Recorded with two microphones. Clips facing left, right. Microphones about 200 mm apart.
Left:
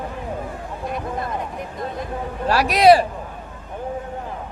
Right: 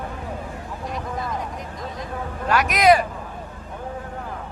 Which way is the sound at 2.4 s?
35° left (ahead or behind).